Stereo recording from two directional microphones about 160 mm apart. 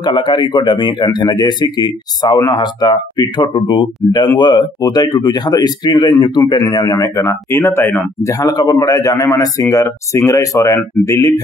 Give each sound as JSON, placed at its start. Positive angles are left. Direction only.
{"t": 0.0, "sound": "speech", "side_deg": 30}